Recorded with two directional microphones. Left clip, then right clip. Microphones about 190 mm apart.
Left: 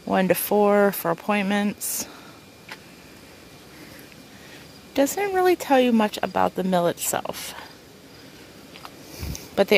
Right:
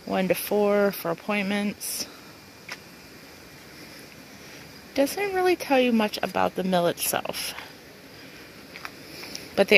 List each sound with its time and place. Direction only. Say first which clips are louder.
0.1 s speech: left 4 dB; 15° left (ahead or behind)
4.9 s speech: left 3 dB; 15° left (ahead or behind)
9.3 s a sound: even; 5° left (ahead or behind)